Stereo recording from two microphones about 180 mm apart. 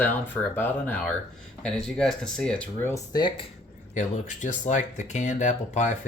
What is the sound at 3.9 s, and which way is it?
Speech, 40° left (ahead or behind).